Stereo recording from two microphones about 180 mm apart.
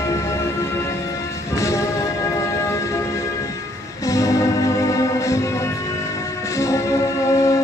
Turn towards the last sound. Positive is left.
turn(degrees=15)  # may be behind; listen again after turning